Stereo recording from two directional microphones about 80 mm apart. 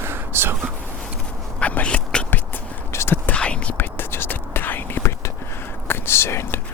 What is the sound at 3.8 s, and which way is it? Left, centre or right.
Whispering, left.